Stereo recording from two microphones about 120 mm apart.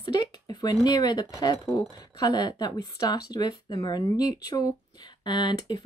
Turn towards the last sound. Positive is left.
turn(degrees=40)  # may be behind; listen again after turning